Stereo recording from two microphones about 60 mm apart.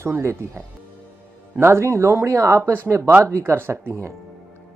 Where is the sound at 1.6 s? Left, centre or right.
Right.